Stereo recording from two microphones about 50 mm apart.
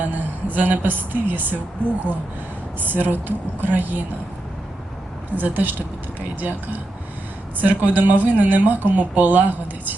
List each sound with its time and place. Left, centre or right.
0.0 s a woman's voice: right
2.7 s speech: right
5.4 s speech: right